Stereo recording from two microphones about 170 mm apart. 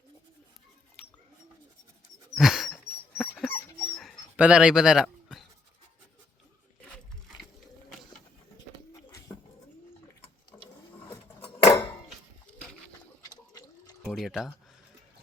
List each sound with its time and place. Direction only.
2.3 s dog: centre (ahead or behind)
4.4 s speech: 5° right (ahead or behind)
10.5 s ratchet: 15° left (ahead or behind)
11.1 s cutlery: 10° left (ahead or behind)
13.2 s gargling: 25° left (ahead or behind)
14.1 s a sound: centre (ahead or behind)